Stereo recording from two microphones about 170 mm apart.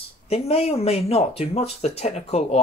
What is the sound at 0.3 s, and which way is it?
Speech, 35° left (ahead or behind).